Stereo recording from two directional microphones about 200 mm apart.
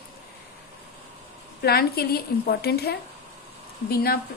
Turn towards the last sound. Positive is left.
turn(degrees=50)  # may be behind; listen again after turning